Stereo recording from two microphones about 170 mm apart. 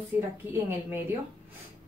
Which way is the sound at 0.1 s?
15° right (ahead or behind).